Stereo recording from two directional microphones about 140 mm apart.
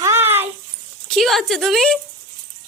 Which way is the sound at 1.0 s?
Centre (ahead or behind).